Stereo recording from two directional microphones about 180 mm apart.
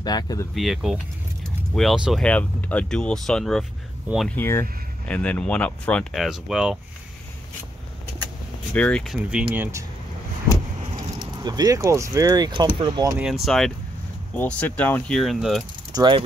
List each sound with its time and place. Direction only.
0.0 s speech: 20° left (ahead or behind)
0.6 s speech: centre (ahead or behind)
4.1 s speech: 10° right (ahead or behind)
4.4 s speech: 10° left (ahead or behind)
8.7 s speech: 5° left (ahead or behind); by 9.8 s 15° right (ahead or behind)
11.0 s speech: 20° right (ahead or behind)
13.5 s speech: centre (ahead or behind)
15.9 s speech: 25° right (ahead or behind)